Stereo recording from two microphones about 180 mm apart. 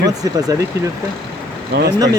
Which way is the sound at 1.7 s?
65° right (ahead or behind).